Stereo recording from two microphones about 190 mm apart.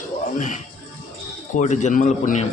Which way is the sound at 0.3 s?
40° left (ahead or behind).